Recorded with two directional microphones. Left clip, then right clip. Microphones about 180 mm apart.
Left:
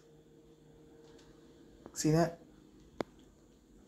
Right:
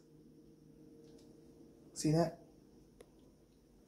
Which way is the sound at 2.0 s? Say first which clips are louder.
Left 3 dB; 10° left (ahead or behind).